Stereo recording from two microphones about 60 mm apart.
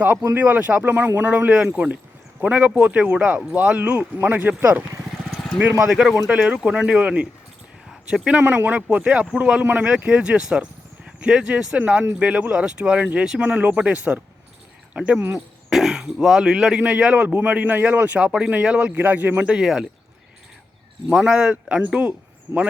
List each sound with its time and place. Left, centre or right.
0.0 s speech: right
5.9 s speech: centre
6.3 s speech: centre
8.4 s speech: right
18.9 s speech: right; by 19.9 s centre
21.1 s speech: centre
21.5 s speech: right
22.5 s speech: right